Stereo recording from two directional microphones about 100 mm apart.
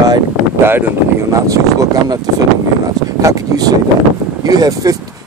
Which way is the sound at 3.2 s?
40° right (ahead or behind).